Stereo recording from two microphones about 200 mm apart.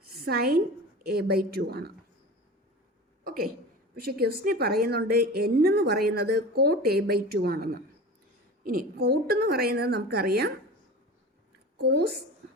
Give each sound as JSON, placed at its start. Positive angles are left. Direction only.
{"t": 0.0, "sound": "a sound", "side_deg": -50}
{"t": 1.0, "sound": "a woman's voice", "side_deg": -50}
{"t": 3.9, "sound": "a woman's voice", "side_deg": -50}
{"t": 11.8, "sound": "a woman's voice", "side_deg": -55}